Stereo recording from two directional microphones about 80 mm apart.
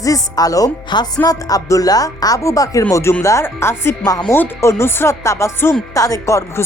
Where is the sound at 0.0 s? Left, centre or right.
Left.